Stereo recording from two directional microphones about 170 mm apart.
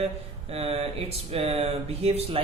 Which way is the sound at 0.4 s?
35° right (ahead or behind).